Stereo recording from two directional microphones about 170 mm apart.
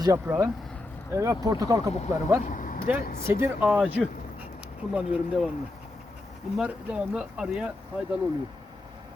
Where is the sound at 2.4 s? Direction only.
50° left (ahead or behind).